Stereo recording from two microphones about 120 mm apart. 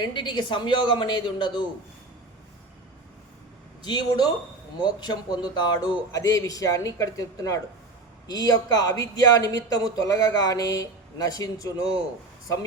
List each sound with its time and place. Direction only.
0.0 s speech: 40° left (ahead or behind)
3.8 s speech: 35° left (ahead or behind)